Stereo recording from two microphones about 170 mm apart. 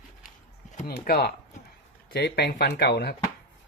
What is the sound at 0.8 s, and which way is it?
A man's voice, 65° left (ahead or behind).